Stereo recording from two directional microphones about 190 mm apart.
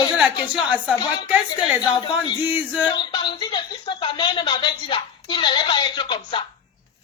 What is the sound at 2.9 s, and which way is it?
Speech, 25° left (ahead or behind).